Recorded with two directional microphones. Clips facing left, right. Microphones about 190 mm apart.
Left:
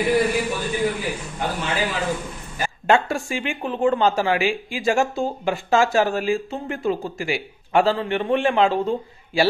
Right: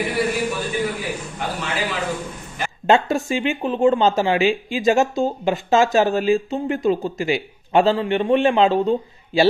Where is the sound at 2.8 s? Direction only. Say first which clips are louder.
Right 2 dB; 20° right (ahead or behind).